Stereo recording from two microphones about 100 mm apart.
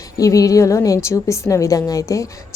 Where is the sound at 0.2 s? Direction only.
35° left (ahead or behind).